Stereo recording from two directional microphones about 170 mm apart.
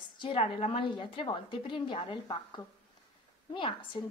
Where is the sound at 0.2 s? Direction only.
35° left (ahead or behind).